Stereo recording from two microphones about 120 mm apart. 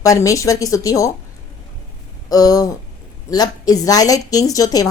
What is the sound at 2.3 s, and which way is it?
A woman's voice, 30° left (ahead or behind).